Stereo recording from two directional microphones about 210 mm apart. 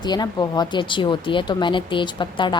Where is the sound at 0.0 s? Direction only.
20° left (ahead or behind).